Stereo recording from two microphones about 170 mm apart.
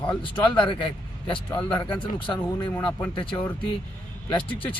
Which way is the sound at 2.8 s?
25° left (ahead or behind).